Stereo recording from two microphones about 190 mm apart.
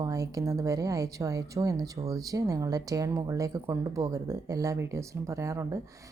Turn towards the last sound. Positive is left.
turn(degrees=-15)  # may be behind; listen again after turning